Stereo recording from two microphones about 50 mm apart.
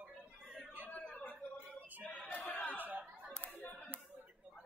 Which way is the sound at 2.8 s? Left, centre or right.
Right.